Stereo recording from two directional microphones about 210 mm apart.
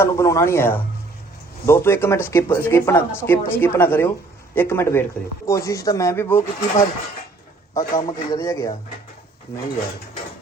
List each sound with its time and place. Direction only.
0.0 s speech: 15° left (ahead or behind)